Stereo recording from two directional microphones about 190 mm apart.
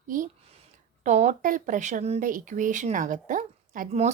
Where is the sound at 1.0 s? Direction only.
40° right (ahead or behind).